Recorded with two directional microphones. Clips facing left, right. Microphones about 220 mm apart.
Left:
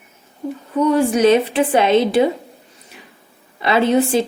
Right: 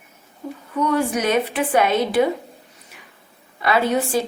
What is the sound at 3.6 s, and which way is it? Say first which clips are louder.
Speech: left 4 dB; 25° left (ahead or behind).